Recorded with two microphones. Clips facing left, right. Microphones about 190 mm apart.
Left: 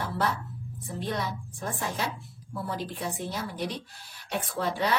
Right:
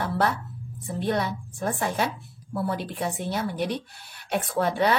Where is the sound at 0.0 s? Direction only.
65° right (ahead or behind).